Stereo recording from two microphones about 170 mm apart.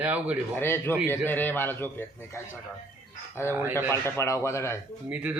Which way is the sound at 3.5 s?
15° right (ahead or behind).